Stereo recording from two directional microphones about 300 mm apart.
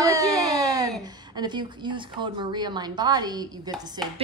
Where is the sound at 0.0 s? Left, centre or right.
Centre.